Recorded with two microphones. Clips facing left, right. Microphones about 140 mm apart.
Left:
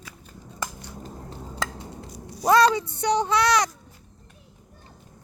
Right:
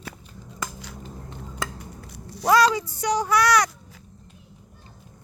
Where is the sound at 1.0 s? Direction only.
35° left (ahead or behind).